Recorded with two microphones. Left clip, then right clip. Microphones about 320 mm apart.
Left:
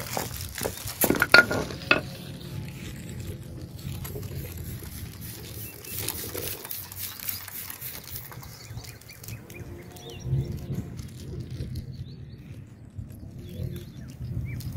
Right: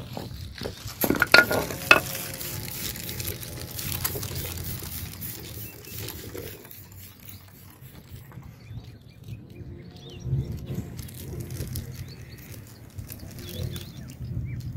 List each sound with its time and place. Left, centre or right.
0.1 s dog: left
0.7 s stir: centre; by 2.2 s right
2.2 s music: right; by 5.5 s centre
5.9 s a sound: centre
10.0 s bird: centre
11.3 s a sound: right
13.5 s bird: right